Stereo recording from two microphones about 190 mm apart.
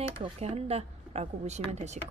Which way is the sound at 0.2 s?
30° right (ahead or behind).